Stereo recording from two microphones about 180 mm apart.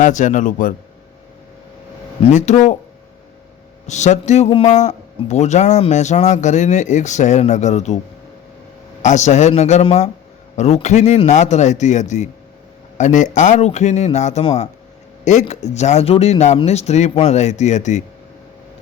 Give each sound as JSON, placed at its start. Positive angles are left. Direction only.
{"t": 0.0, "sound": "a man's voice", "side_deg": 45}
{"t": 2.3, "sound": "a man's voice", "side_deg": 40}
{"t": 3.8, "sound": "a man's voice", "side_deg": 40}
{"t": 9.0, "sound": "a man's voice", "side_deg": 40}